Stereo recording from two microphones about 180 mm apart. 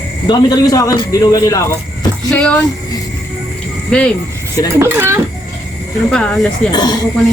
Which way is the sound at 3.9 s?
5° left (ahead or behind).